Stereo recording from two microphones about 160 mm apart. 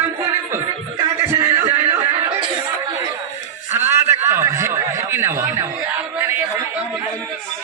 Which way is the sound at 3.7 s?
15° right (ahead or behind).